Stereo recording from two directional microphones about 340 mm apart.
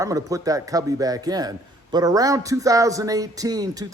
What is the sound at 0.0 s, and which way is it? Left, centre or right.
A man's voice, centre.